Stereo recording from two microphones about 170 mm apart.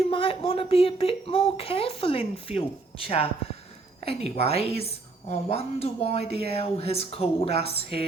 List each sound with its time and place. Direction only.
0.1 s speech: 35° left (ahead or behind)